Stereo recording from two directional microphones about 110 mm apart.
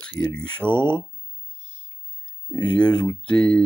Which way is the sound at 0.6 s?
15° left (ahead or behind).